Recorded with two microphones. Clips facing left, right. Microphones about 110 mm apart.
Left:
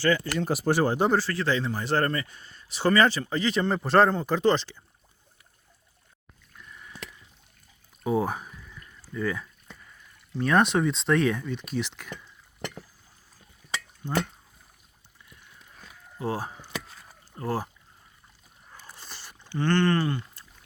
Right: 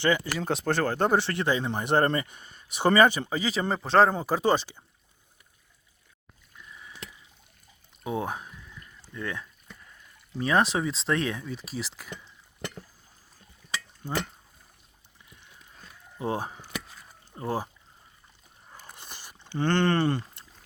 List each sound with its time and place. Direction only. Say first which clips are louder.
0.3 s speech: left 3 dB; 5° left (ahead or behind)
1.1 s speech: even; 20° right (ahead or behind)
6.5 s a sound: left 1 dB; 5° right (ahead or behind)
8.0 s speech: left 5 dB; centre (ahead or behind)
16.1 s speech: even; 20° right (ahead or behind)
18.7 s a sound: even; 20° right (ahead or behind)
20.0 s rowboat: right 2 dB; 30° right (ahead or behind)